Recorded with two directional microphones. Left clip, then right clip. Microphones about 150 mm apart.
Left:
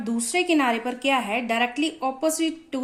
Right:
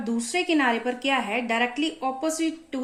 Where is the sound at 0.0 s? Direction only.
30° left (ahead or behind).